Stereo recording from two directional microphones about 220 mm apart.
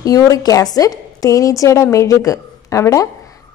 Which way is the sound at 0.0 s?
15° left (ahead or behind).